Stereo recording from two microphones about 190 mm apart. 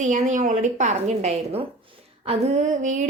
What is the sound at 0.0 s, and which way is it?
A woman's voice, 40° right (ahead or behind).